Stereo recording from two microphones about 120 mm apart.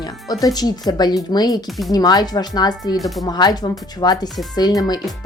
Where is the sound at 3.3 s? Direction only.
35° left (ahead or behind).